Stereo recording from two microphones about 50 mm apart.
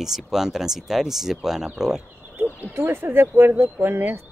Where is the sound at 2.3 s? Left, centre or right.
Right.